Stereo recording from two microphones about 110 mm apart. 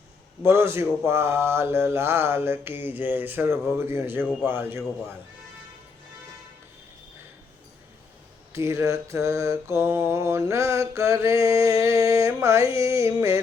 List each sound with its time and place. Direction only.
0.4 s mantra: 25° right (ahead or behind)
8.5 s mantra: 25° right (ahead or behind)